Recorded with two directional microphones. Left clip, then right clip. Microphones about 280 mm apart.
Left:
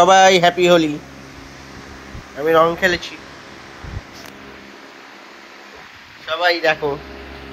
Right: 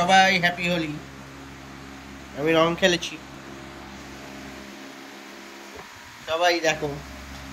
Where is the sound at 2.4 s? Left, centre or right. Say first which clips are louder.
Left 6 dB; centre.